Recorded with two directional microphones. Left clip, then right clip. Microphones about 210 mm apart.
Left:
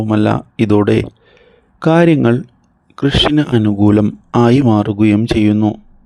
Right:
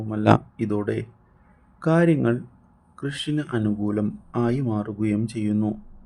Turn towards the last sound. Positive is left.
turn(degrees=40)  # may be behind; listen again after turning